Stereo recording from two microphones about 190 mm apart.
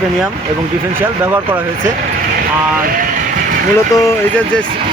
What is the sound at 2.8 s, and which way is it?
Speech, 50° right (ahead or behind).